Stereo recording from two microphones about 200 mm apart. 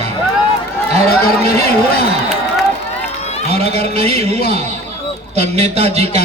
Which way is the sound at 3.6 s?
30° right (ahead or behind).